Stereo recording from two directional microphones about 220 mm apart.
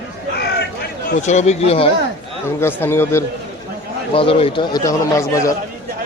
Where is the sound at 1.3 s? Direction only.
30° left (ahead or behind).